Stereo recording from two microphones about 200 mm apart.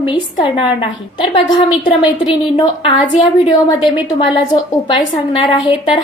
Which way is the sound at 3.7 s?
20° left (ahead or behind).